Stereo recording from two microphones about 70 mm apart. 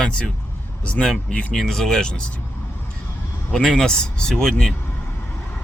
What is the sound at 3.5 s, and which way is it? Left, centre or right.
Speech, centre.